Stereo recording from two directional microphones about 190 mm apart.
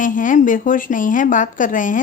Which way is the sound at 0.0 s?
45° left (ahead or behind).